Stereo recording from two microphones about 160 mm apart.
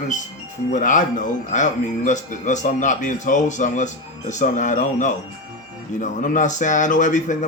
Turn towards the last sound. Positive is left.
turn(degrees=50)  # may be behind; listen again after turning